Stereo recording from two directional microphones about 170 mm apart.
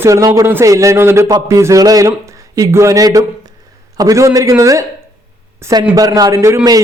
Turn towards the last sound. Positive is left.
turn(degrees=-20)  # may be behind; listen again after turning